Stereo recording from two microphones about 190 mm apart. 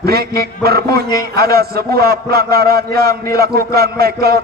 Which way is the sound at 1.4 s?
55° right (ahead or behind).